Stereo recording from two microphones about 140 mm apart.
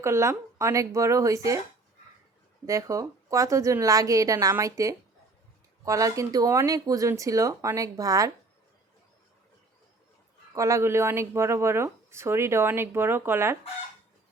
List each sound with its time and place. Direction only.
0.0 s speech: 20° right (ahead or behind)
2.6 s speech: 25° right (ahead or behind)
10.5 s speech: 20° right (ahead or behind)